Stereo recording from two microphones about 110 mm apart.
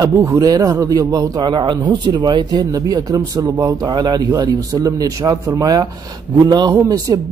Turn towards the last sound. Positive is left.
turn(degrees=-30)  # may be behind; listen again after turning